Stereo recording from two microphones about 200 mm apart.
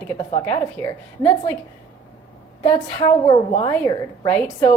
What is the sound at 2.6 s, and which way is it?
A woman's voice, 20° left (ahead or behind).